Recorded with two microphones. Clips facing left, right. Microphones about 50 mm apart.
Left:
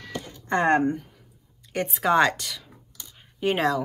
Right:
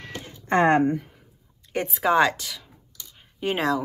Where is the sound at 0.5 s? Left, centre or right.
Right.